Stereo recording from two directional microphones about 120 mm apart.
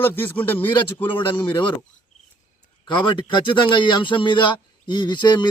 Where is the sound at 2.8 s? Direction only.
40° left (ahead or behind).